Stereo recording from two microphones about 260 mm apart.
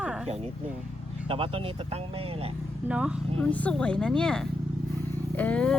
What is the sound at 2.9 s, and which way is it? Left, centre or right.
Speech, centre.